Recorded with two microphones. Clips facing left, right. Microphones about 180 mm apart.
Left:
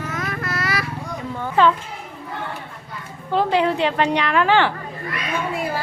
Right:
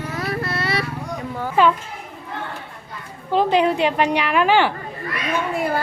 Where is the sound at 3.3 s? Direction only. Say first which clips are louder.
Right 1 dB; 15° right (ahead or behind).